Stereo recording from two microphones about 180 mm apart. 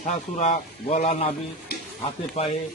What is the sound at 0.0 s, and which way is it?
A man's voice, 45° left (ahead or behind).